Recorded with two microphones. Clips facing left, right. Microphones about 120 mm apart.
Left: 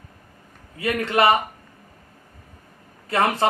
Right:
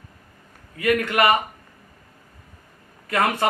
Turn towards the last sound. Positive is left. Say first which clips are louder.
# left 1 dB
turn(degrees=30)  # may be behind; listen again after turning